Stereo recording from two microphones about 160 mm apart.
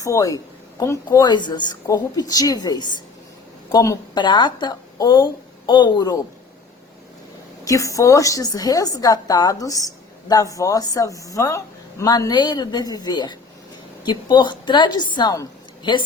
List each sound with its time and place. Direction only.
0.0 s a woman's voice: 20° left (ahead or behind)
7.6 s a woman's voice: 20° left (ahead or behind)